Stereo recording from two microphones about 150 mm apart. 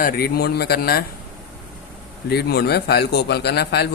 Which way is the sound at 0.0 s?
80° left.